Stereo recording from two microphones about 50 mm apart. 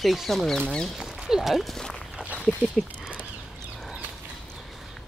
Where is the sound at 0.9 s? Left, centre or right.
Centre.